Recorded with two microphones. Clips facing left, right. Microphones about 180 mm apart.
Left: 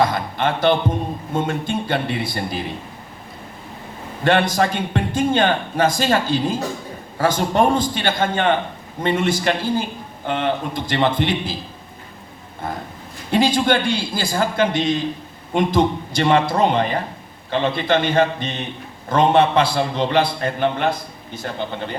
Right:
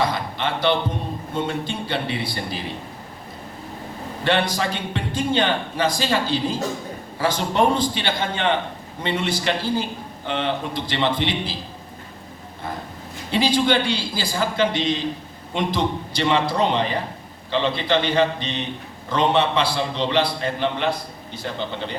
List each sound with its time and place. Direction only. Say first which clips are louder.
0.1 s a man's voice: left 4 dB; 50° left (ahead or behind)
4.2 s a man's voice: left 4 dB; 45° left (ahead or behind)
13.3 s a man's voice: left 2 dB; 50° left (ahead or behind)